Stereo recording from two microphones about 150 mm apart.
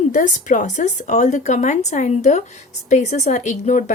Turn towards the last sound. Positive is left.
turn(degrees=55)  # may be behind; listen again after turning